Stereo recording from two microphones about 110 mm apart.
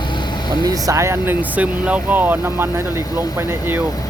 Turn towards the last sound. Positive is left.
turn(degrees=-20)  # may be behind; listen again after turning